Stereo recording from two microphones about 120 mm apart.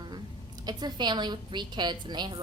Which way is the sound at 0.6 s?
35° right (ahead or behind).